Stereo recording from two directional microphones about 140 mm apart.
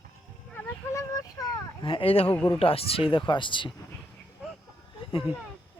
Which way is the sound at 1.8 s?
40° left (ahead or behind).